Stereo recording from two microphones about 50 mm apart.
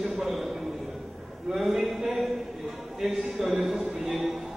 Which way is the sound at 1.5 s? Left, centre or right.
Centre.